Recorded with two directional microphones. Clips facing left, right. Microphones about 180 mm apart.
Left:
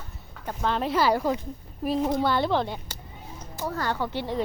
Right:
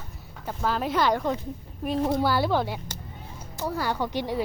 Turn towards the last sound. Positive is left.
turn(degrees=-15)  # may be behind; listen again after turning